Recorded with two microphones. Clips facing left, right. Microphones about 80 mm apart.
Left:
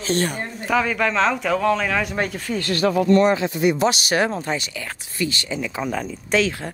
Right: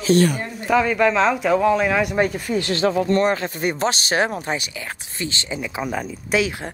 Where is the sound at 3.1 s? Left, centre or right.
Right.